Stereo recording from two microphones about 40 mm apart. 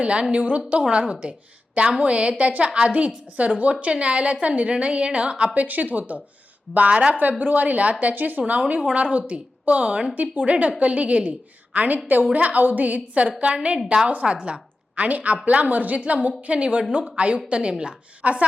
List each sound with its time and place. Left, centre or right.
0.0 s a woman's voice: right
2.6 s a woman's voice: right
5.5 s a woman's voice: right
6.9 s a woman's voice: right
7.2 s a woman's voice: right
8.1 s speech: right
8.4 s a woman's voice: right
13.4 s a woman's voice: right
14.1 s a woman's voice: right
14.3 s a woman's voice: centre
14.9 s a woman's voice: right